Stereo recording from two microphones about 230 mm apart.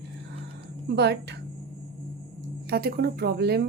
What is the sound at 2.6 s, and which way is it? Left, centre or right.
A woman's voice, right.